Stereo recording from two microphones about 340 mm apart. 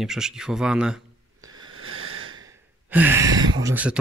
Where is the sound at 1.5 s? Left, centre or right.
Right.